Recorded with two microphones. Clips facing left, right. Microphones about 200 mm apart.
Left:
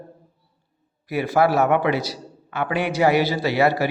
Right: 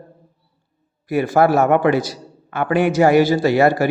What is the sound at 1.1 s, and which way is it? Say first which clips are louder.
A man's voice: right 4 dB; 45° right (ahead or behind).